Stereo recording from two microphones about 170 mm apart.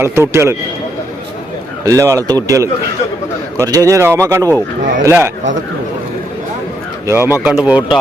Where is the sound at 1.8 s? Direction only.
20° right (ahead or behind).